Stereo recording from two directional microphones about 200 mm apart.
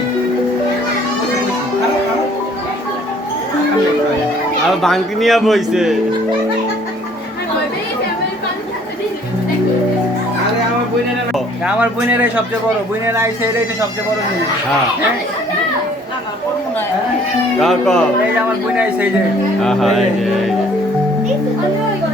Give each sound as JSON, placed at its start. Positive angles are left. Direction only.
{"t": 4.8, "sound": "a man's voice", "side_deg": 0}
{"t": 11.6, "sound": "a man's voice", "side_deg": -5}
{"t": 17.6, "sound": "a man's voice", "side_deg": 0}
{"t": 19.6, "sound": "a man's voice", "side_deg": 0}